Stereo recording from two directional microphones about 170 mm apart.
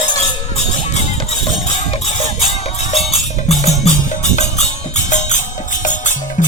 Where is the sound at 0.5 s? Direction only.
40° left (ahead or behind).